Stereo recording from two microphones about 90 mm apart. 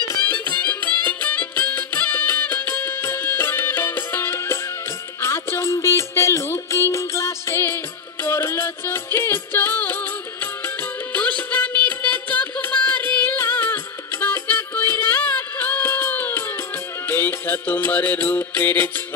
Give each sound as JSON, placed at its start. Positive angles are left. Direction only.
{"t": 0.5, "sound": "music", "side_deg": 20}